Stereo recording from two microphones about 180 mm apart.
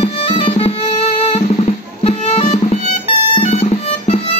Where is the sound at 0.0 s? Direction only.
30° left (ahead or behind).